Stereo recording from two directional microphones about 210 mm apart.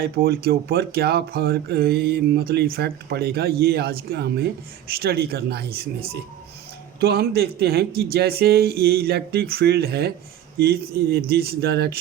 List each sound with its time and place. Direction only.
0.0 s speech: 50° right (ahead or behind)